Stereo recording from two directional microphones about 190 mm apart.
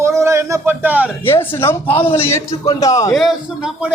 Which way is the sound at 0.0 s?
15° right (ahead or behind).